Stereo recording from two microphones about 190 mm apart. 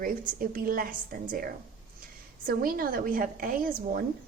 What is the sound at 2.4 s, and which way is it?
A woman's voice, 50° right (ahead or behind).